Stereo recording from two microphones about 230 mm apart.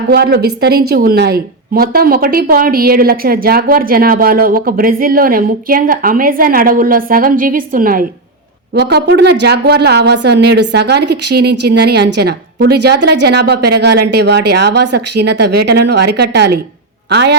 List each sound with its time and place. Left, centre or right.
0.1 s a woman's voice: right